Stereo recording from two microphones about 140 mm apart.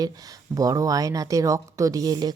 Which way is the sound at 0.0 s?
25° right (ahead or behind).